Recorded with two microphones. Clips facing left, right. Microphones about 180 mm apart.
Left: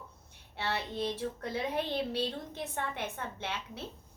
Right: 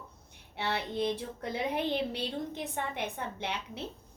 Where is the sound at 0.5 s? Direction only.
15° right (ahead or behind).